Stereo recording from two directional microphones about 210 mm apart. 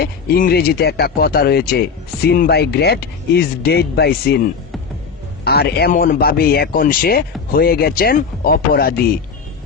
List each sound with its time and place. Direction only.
0.0 s speech: 45° left (ahead or behind)
5.5 s speech: 50° left (ahead or behind)